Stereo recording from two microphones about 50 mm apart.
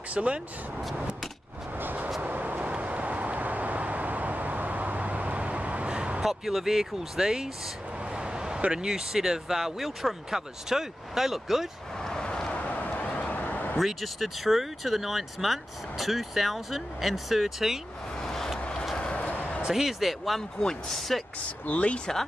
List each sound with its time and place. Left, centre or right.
0.1 s speech: right
1.8 s vehicle: right
6.2 s speech: centre
8.1 s a sound: centre
8.7 s speech: centre
12.0 s vehicle: centre
12.6 s vehicle: left
13.7 s speech: centre
18.2 s vehicle: centre
18.6 s a sound: centre
19.7 s speech: centre
21.6 s speech: left